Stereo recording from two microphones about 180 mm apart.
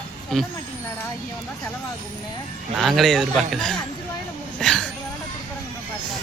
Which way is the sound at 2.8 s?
Centre (ahead or behind).